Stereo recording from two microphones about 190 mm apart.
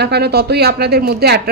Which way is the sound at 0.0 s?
60° right (ahead or behind).